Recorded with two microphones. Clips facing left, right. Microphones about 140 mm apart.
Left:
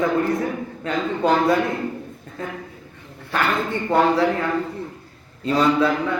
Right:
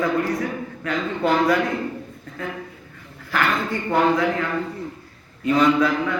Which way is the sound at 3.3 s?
25° left (ahead or behind).